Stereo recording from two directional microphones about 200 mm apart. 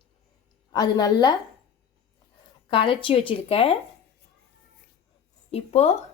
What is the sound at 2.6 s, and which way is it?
Speech, 25° left (ahead or behind).